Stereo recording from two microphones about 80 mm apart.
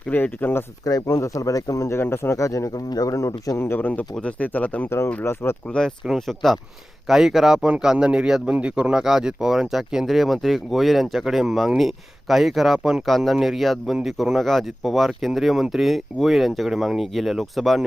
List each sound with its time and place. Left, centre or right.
0.1 s speech: left
0.9 s speech: left
2.0 s speech: left
3.6 s speech: left
4.9 s speech: left
6.1 s a man's voice: centre